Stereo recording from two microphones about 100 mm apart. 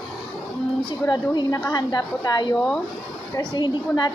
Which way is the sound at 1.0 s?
45° left (ahead or behind).